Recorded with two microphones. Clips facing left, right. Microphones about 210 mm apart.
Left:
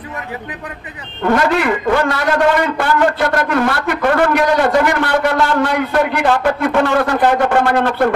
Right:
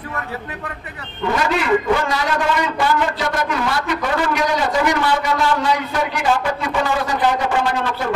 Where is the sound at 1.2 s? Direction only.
60° left (ahead or behind).